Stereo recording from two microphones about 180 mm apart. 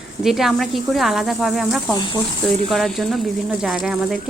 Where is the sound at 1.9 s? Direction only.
25° left (ahead or behind).